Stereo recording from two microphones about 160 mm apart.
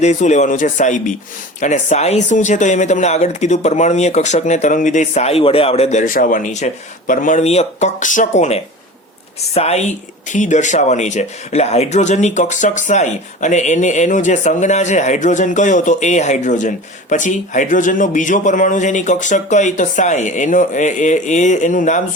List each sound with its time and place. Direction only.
0.0 s speech: 45° left (ahead or behind)